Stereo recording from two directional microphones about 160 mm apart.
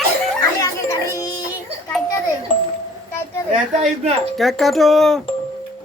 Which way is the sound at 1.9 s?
Centre (ahead or behind).